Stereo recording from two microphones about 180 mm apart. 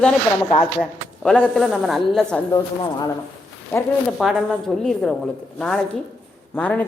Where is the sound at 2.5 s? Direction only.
20° left (ahead or behind).